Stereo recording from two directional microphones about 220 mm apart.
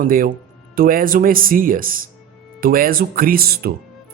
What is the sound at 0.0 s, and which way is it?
A man's voice, 40° right (ahead or behind).